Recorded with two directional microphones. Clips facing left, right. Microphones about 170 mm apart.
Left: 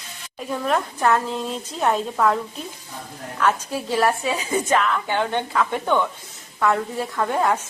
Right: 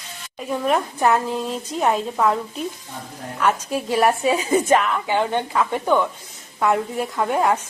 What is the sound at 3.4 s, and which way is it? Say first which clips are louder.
Speech: right 1 dB; 10° right (ahead or behind).